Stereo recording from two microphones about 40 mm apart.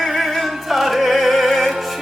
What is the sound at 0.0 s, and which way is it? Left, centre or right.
Music, centre.